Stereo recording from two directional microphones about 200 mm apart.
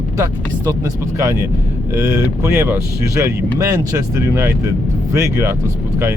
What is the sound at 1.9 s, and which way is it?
Speech, 15° right (ahead or behind).